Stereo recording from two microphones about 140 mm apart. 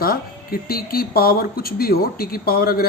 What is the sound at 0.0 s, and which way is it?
Speech, 90° left.